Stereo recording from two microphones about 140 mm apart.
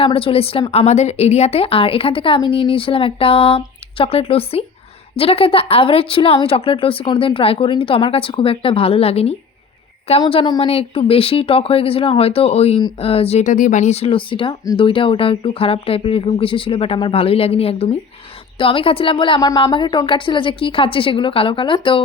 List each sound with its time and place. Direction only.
0.0 s a woman's voice: 40° left (ahead or behind)
10.2 s a woman's voice: 35° left (ahead or behind)